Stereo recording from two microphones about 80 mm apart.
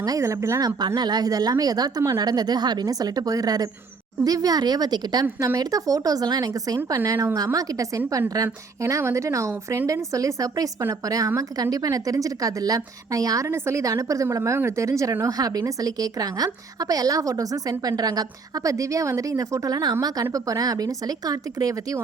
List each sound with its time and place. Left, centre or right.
0.0 s speech: right
0.6 s a woman's voice: right
6.7 s a woman's voice: right